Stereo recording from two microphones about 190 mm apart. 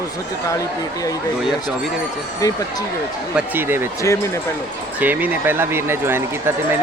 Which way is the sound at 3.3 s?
10° right (ahead or behind).